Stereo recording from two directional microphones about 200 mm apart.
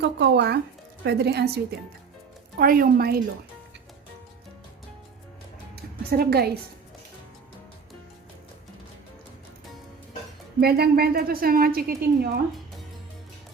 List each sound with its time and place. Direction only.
0.0 s a woman's voice: 60° right (ahead or behind)
5.7 s music: 50° right (ahead or behind)
10.6 s a woman's voice: 50° right (ahead or behind)